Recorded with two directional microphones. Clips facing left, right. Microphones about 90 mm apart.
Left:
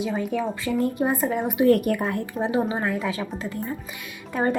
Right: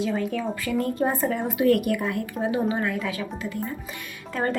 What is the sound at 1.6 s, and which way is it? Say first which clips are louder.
Speech: left 2 dB; 35° left (ahead or behind).